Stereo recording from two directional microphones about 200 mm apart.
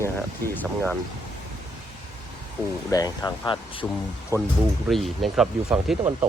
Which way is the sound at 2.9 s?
20° left (ahead or behind).